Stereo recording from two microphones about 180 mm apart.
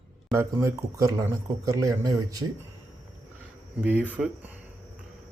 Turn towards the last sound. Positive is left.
turn(degrees=-10)  # may be behind; listen again after turning